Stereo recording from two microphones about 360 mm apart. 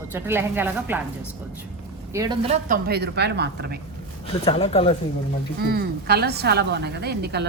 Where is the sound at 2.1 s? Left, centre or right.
Centre; by 3.8 s right.